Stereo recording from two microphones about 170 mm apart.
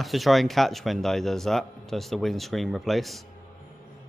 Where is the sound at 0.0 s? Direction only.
Centre (ahead or behind).